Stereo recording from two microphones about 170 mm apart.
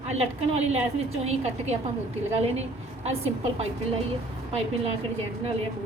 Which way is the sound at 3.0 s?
40° right (ahead or behind).